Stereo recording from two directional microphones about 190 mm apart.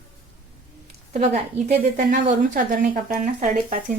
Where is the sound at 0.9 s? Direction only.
35° right (ahead or behind).